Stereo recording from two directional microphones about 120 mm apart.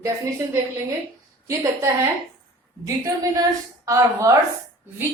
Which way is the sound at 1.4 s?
25° right (ahead or behind).